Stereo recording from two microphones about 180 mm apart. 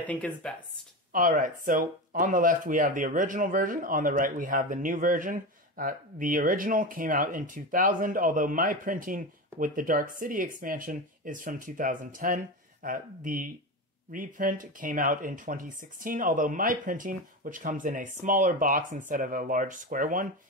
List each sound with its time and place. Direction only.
0.0 s speech: 5° left (ahead or behind)
1.1 s speech: 50° right (ahead or behind)